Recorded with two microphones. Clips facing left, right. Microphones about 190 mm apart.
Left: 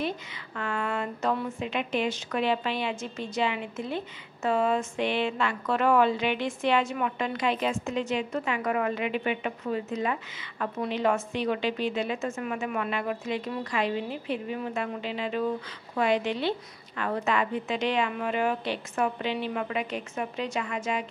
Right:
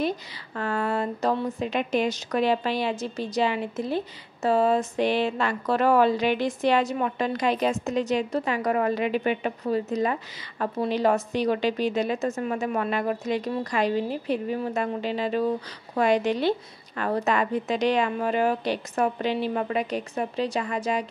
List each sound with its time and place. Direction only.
0.6 s a woman's voice: 35° right (ahead or behind)